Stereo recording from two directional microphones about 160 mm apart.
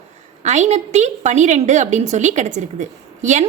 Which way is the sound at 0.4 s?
45° right (ahead or behind).